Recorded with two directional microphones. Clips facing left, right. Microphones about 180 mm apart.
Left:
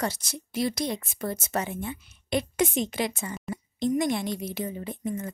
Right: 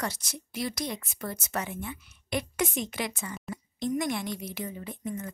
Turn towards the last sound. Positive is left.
turn(degrees=25)  # may be behind; listen again after turning